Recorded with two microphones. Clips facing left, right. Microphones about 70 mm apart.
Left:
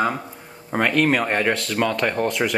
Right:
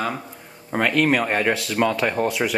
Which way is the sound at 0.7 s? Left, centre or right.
Centre.